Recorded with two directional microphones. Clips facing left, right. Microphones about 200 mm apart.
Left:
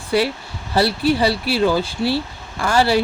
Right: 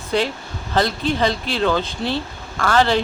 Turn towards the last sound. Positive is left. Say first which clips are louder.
# left 1 dB
turn(degrees=10)  # may be behind; listen again after turning